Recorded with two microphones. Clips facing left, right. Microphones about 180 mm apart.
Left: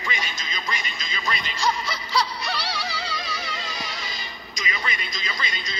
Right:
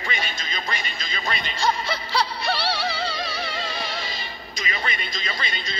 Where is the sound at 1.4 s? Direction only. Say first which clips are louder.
Right 2 dB; 55° right (ahead or behind).